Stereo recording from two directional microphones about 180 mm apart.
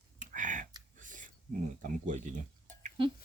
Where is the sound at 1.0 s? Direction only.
45° right (ahead or behind).